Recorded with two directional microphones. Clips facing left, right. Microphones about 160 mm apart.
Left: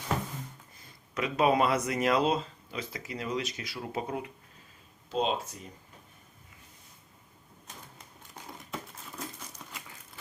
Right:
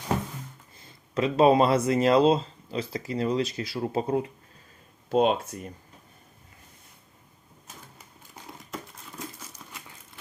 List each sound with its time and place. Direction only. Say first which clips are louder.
1.1 s speech: right 6 dB; 30° right (ahead or behind)
5.0 s speech: right 7 dB; 55° right (ahead or behind)
8.7 s a sound: right 2 dB; centre (ahead or behind)